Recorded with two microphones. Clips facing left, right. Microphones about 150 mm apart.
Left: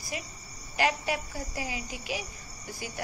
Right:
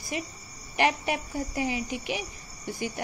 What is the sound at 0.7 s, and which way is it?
Speech, 25° right (ahead or behind).